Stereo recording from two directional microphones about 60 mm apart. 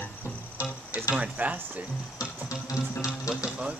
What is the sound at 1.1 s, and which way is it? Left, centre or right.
Speech, right.